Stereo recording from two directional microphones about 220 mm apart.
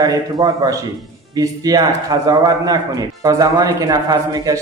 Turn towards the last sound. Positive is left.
turn(degrees=-15)  # may be behind; listen again after turning